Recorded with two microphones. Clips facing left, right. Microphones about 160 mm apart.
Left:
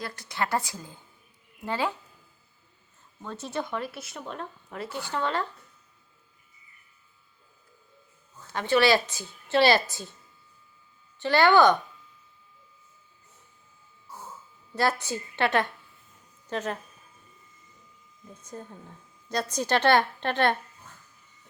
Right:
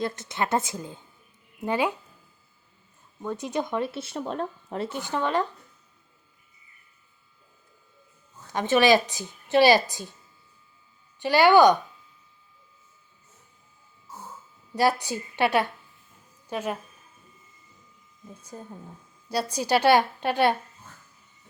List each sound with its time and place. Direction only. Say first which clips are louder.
0.0 s a woman's voice: right 4 dB; 20° right (ahead or behind)
3.2 s speech: right 4 dB; 15° right (ahead or behind)
8.5 s a woman's voice: right 2 dB; 20° right (ahead or behind)
11.2 s a woman's voice: right 3 dB; 10° right (ahead or behind)
14.8 s a woman's voice: right 3 dB; 15° right (ahead or behind)
18.4 s a woman's voice: even; 10° right (ahead or behind)